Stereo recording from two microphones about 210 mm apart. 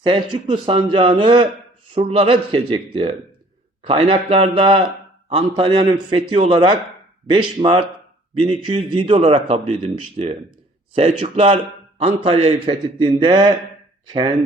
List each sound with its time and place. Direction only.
0.0 s a man's voice: 20° right (ahead or behind)